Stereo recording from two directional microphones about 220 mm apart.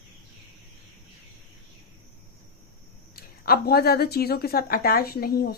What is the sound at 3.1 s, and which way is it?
Speech, 45° left (ahead or behind).